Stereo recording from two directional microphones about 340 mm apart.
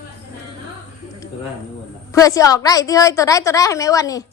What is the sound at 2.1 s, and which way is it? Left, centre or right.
A woman's voice, centre.